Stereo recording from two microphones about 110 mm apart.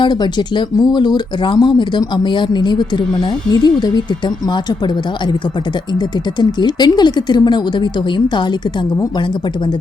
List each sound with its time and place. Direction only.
0.0 s speech: 45° left (ahead or behind)
6.4 s speech: 40° left (ahead or behind)